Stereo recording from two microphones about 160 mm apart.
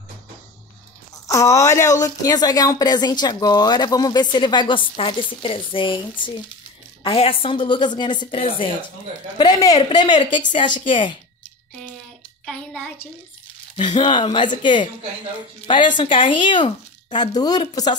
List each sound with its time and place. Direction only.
1.2 s a woman's voice: 20° left (ahead or behind)
9.4 s a woman's voice: 25° left (ahead or behind)
12.4 s a sound: 5° left (ahead or behind)
13.7 s a woman's voice: 30° left (ahead or behind)